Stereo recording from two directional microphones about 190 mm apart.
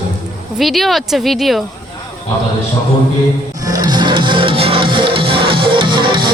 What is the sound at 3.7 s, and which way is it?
Music, 20° right (ahead or behind).